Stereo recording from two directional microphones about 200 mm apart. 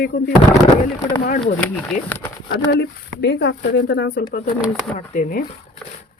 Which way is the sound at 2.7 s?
55° left (ahead or behind).